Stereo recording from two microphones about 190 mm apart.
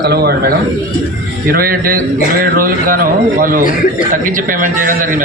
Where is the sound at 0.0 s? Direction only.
55° right (ahead or behind).